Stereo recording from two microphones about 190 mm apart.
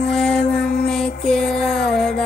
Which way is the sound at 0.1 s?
5° left (ahead or behind).